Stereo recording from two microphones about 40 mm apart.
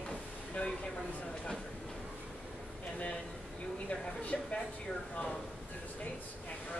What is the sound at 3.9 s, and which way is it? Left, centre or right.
Speech, left.